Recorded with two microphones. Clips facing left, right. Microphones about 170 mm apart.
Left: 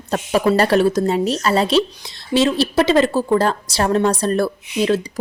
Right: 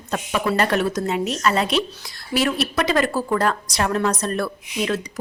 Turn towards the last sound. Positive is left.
turn(degrees=30)  # may be behind; listen again after turning